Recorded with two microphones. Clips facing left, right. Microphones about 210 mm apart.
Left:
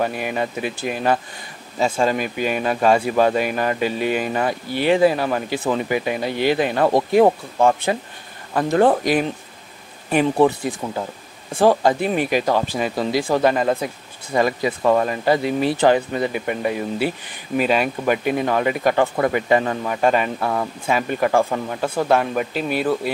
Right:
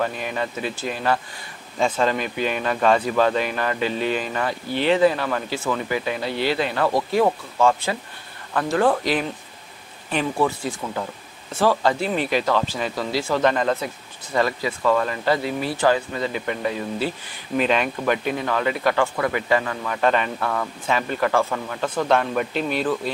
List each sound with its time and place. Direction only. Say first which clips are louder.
0.0 s speech: left 3 dB; 10° left (ahead or behind)
10.4 s speech: left 5 dB; 20° left (ahead or behind)
16.3 s speech: left 3 dB; 10° left (ahead or behind)
19.1 s speech: left 4 dB; 30° left (ahead or behind)
19.9 s speech: left 1 dB; 10° left (ahead or behind)